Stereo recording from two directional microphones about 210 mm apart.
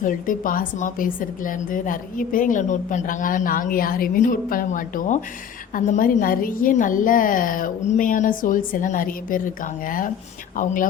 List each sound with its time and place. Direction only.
0.0 s a woman's voice: 40° left (ahead or behind)